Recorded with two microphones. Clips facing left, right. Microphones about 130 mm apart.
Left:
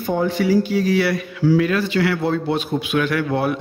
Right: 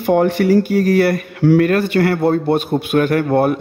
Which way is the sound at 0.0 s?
70° right (ahead or behind).